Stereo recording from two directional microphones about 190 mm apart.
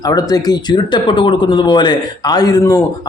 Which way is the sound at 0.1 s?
20° left (ahead or behind).